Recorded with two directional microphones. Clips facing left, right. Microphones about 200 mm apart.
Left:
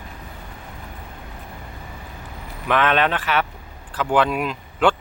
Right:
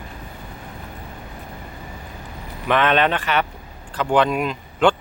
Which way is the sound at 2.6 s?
Centre (ahead or behind).